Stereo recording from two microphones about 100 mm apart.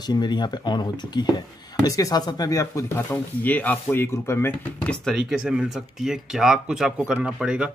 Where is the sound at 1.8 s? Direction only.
35° left (ahead or behind).